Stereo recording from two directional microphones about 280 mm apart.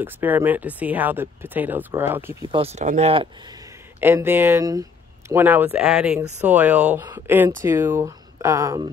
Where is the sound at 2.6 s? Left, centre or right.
Right.